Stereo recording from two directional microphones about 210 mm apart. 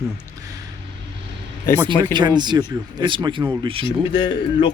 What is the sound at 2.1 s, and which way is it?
Speech, 20° right (ahead or behind).